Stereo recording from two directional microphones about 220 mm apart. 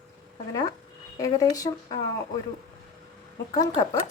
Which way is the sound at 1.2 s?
15° left (ahead or behind).